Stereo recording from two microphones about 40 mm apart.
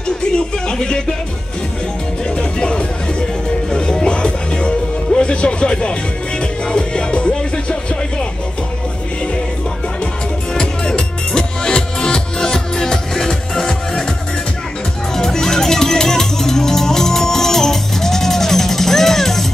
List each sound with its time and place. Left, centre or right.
0.7 s music: left
2.3 s music: left
10.5 s music: centre
15.1 s music: centre